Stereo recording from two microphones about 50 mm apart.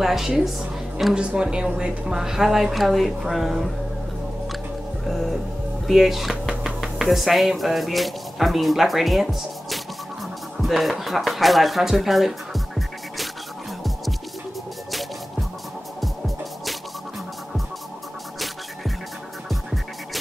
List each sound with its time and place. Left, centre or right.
0.0 s a woman's voice: centre
5.0 s speech: centre
14.9 s music: centre